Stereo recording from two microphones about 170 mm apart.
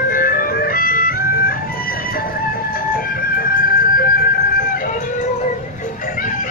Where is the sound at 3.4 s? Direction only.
60° left (ahead or behind).